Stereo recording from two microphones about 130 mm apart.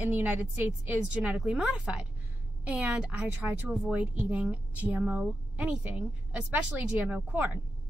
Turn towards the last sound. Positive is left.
turn(degrees=-10)  # may be behind; listen again after turning